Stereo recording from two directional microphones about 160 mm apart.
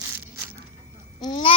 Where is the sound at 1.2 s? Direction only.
25° left (ahead or behind).